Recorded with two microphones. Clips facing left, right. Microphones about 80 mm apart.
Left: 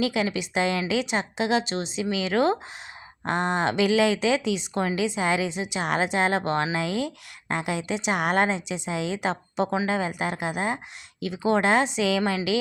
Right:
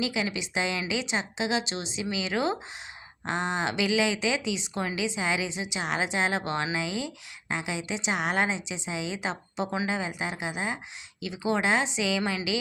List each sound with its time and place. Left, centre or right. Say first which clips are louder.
0.0 s a woman's voice: left 5 dB; left